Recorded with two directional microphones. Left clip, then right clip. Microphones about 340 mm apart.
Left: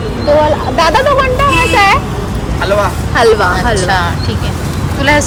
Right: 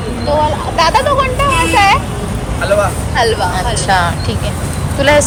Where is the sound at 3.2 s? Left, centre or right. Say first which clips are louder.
Left 5 dB; left.